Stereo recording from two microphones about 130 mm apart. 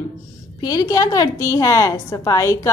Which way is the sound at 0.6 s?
30° left (ahead or behind).